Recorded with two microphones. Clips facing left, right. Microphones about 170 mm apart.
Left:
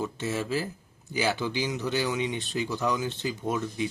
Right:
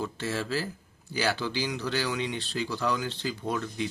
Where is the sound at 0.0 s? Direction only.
20° left (ahead or behind).